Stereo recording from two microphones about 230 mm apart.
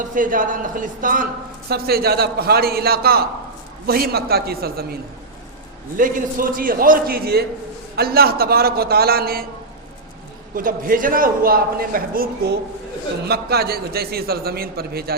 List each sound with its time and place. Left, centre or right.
0.1 s a man's voice: right
6.0 s a man's voice: right
10.5 s a man's voice: right